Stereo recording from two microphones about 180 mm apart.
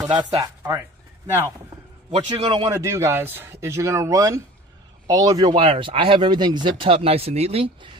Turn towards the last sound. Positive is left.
turn(degrees=-30)  # may be behind; listen again after turning